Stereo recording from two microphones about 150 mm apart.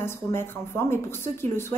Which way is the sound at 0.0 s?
15° left (ahead or behind).